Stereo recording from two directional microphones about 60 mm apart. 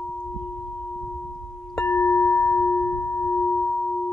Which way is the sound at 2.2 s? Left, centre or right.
Left.